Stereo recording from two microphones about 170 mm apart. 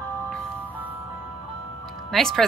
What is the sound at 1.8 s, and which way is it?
Music, centre (ahead or behind).